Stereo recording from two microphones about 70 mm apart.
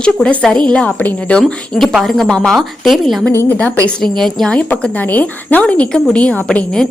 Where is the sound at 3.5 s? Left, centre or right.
Left.